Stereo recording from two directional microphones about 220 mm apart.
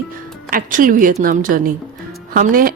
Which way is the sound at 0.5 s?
40° right (ahead or behind).